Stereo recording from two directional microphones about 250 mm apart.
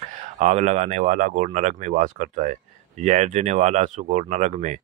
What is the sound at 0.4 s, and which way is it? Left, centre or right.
Speech, right.